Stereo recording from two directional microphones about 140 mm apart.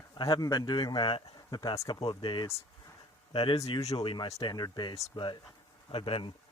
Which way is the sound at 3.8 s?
25° left (ahead or behind).